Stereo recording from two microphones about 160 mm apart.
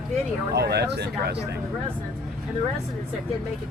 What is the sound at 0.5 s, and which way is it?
Speech, 90° right.